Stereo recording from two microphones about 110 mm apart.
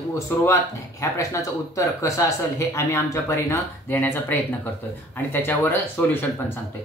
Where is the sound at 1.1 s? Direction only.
25° left (ahead or behind).